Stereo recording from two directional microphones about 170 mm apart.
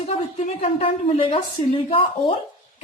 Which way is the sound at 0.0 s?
40° left (ahead or behind).